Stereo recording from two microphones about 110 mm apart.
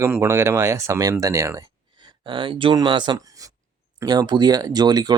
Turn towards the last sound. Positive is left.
turn(degrees=-40)  # may be behind; listen again after turning